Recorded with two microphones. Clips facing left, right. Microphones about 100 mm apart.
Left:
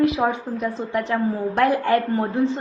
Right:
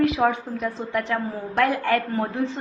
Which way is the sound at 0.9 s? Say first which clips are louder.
Left 4 dB; 30° left (ahead or behind).